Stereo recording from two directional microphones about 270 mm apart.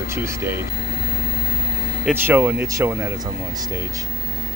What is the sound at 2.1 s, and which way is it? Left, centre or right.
Speech, centre.